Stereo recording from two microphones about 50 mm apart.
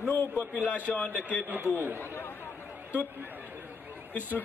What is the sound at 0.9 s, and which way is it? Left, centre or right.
Speech, left.